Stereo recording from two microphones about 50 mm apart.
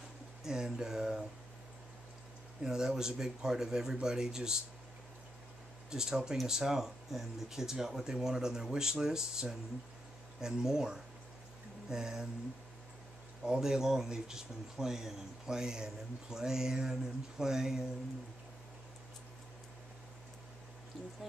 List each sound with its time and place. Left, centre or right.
0.4 s speech: centre
2.6 s speech: centre
5.9 s speech: centre
13.4 s speech: centre